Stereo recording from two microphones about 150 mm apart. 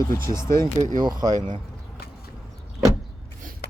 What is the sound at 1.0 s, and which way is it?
Speech, 25° right (ahead or behind).